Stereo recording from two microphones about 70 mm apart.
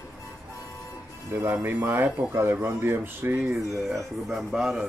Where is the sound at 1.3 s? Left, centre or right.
Right.